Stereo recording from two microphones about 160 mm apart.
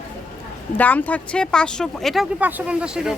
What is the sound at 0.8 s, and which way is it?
Speech, 10° left (ahead or behind).